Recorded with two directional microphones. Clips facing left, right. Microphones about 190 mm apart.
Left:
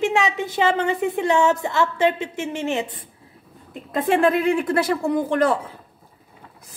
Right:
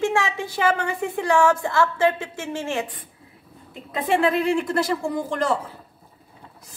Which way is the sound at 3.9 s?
50° left (ahead or behind).